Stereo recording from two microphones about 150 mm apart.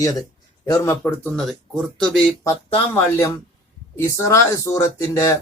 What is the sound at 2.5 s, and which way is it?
A man's voice, 15° left (ahead or behind).